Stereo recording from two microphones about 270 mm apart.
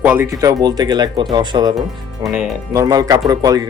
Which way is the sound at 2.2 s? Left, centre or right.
Centre.